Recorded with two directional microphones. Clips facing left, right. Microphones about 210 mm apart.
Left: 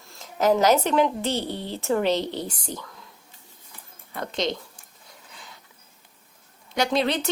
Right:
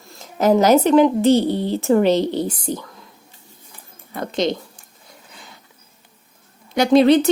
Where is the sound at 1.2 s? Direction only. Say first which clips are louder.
Right 12 dB; 40° right (ahead or behind).